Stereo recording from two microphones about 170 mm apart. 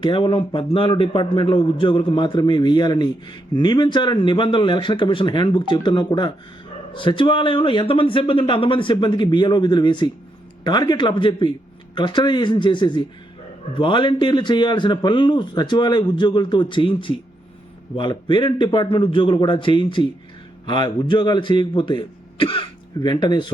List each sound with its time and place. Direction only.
0.0 s a man's voice: 30° left (ahead or behind)